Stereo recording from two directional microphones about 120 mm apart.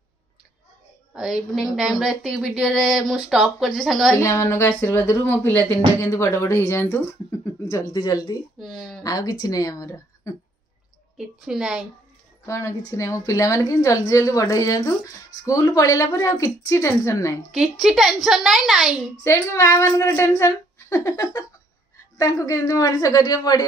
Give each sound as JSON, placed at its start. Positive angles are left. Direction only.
{"t": 1.1, "sound": "speech", "side_deg": -5}
{"t": 4.2, "sound": "a woman's voice", "side_deg": 25}
{"t": 7.9, "sound": "a woman's voice", "side_deg": 35}
{"t": 11.1, "sound": "speech", "side_deg": -5}
{"t": 12.4, "sound": "a woman's voice", "side_deg": 25}
{"t": 17.5, "sound": "speech", "side_deg": 0}
{"t": 19.2, "sound": "a woman's voice", "side_deg": 25}